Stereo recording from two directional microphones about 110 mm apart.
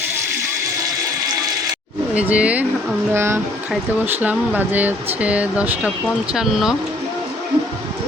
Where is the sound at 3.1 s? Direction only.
25° right (ahead or behind); by 6.7 s 5° right (ahead or behind).